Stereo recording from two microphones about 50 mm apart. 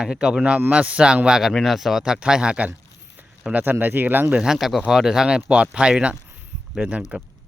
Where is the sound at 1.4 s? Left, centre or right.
Centre; by 2.7 s right.